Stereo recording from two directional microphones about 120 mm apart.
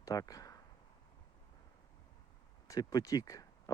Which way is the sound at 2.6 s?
30° left (ahead or behind).